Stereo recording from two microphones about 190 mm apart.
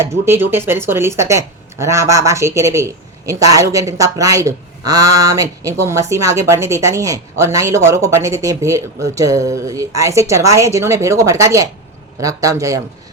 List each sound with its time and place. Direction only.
0.0 s speech: 15° right (ahead or behind)